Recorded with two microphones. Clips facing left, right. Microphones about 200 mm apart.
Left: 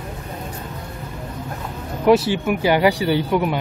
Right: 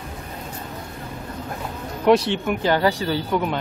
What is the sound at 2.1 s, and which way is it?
Speech, 5° left (ahead or behind).